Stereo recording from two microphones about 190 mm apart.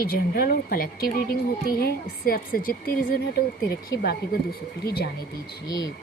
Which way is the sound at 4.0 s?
55° left (ahead or behind).